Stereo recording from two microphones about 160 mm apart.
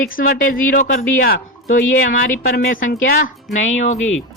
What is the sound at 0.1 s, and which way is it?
Speech, 60° left (ahead or behind).